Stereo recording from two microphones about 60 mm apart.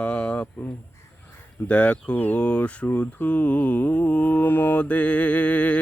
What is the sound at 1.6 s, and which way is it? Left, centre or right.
Mantra, left.